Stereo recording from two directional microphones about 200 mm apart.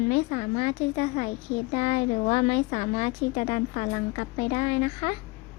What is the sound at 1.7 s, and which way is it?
A woman's voice, 30° left (ahead or behind).